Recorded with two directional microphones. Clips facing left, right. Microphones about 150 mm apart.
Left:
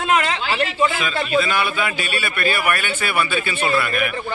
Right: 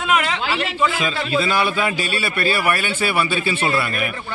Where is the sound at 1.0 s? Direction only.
30° right (ahead or behind).